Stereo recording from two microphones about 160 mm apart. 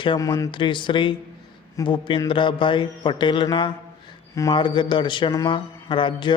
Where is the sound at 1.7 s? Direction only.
30° left (ahead or behind).